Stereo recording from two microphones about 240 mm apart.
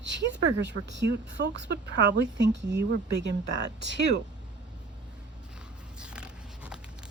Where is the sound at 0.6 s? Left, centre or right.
Right.